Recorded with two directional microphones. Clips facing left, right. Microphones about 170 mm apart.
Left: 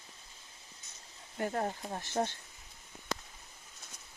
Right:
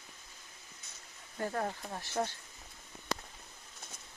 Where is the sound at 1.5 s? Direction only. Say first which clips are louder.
Left 1 dB; 25° left (ahead or behind).